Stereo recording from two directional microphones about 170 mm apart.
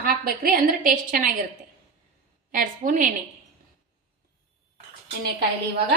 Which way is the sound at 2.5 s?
50° right (ahead or behind).